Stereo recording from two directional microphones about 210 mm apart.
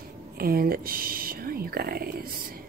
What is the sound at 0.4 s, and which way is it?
Speech, 45° right (ahead or behind).